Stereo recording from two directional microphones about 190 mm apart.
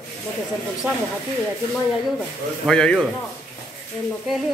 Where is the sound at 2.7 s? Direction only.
5° left (ahead or behind).